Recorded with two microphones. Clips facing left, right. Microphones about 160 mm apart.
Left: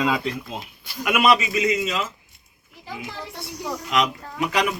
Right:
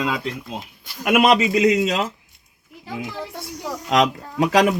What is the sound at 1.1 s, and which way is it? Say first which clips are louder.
A man's voice: right 4 dB; 60° right (ahead or behind).